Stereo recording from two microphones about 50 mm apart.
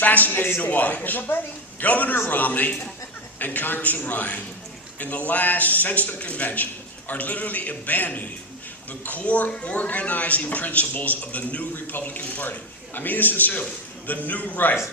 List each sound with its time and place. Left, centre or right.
0.0 s a man's voice: left